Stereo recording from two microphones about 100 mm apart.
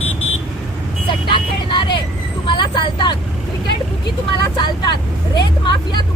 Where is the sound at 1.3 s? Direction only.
55° left (ahead or behind).